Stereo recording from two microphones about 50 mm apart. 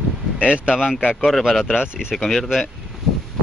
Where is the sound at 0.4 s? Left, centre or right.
Right.